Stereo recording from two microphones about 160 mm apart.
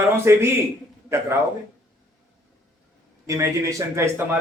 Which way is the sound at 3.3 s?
15° right (ahead or behind).